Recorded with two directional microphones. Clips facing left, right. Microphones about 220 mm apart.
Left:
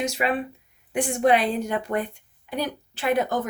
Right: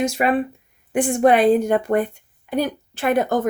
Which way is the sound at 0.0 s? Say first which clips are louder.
Right 6 dB; 50° right (ahead or behind).